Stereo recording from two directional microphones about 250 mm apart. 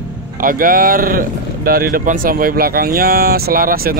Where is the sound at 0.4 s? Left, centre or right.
Right.